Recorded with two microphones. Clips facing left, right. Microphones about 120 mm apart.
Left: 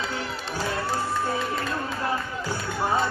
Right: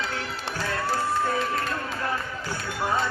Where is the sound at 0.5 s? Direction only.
25° left (ahead or behind).